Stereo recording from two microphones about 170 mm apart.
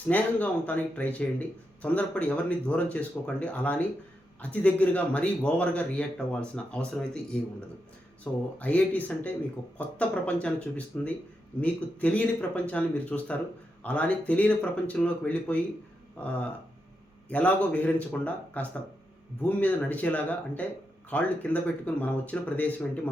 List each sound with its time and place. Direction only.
0.1 s speech: 10° left (ahead or behind)
8.2 s speech: 10° left (ahead or behind)
17.2 s speech: 10° left (ahead or behind)